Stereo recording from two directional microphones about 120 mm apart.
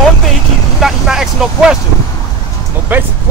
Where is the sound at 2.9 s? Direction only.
15° right (ahead or behind).